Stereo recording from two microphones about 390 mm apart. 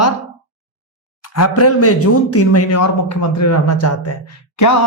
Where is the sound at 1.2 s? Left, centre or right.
Left.